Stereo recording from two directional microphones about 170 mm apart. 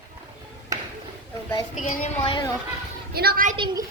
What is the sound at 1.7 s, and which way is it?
Speech, 50° left (ahead or behind).